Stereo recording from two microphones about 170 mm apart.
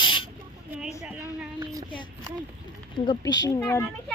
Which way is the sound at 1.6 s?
20° right (ahead or behind).